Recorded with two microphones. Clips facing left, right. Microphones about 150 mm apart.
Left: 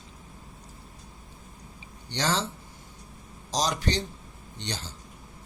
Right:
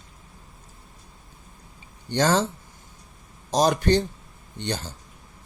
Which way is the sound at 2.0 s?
50° right (ahead or behind).